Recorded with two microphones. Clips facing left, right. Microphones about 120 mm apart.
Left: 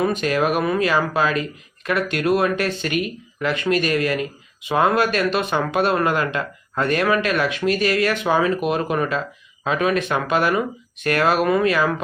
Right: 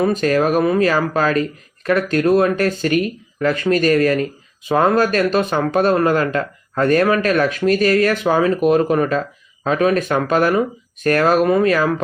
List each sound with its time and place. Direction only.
0.0 s speech: 40° right (ahead or behind)